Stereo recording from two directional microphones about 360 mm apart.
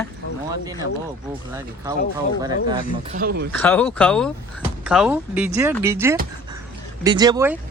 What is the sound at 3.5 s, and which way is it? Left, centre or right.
A woman's voice, centre.